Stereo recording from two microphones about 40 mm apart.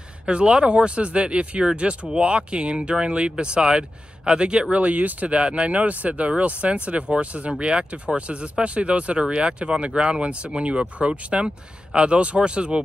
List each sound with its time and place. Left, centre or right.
0.3 s speech: right
4.8 s speech: right